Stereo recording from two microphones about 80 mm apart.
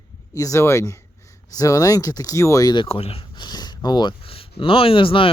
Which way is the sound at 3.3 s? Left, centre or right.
Left.